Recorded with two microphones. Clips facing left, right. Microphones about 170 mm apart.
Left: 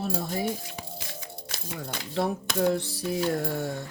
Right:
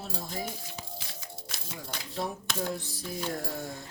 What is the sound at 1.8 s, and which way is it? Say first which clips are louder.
Speech: left 7 dB; 70° left (ahead or behind).